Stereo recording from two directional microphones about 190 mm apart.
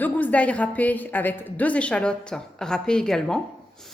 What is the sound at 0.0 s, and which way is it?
A woman's voice, 10° left (ahead or behind).